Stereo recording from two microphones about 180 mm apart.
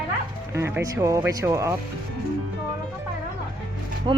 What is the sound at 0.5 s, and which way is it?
A woman's voice, 15° right (ahead or behind).